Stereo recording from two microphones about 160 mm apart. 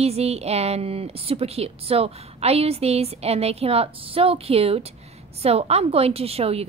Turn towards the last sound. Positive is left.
turn(degrees=-40)  # may be behind; listen again after turning